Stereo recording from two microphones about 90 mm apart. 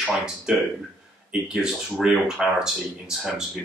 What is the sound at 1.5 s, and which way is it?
Speech, 5° right (ahead or behind).